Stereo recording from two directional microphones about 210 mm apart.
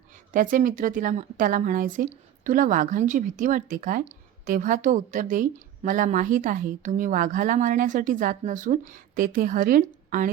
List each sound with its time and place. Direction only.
0.3 s speech: 40° right (ahead or behind)